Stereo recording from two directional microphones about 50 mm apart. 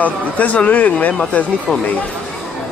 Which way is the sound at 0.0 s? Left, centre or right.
Left.